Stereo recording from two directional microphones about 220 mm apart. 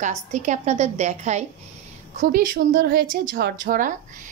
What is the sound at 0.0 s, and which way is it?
A woman's voice, 35° right (ahead or behind).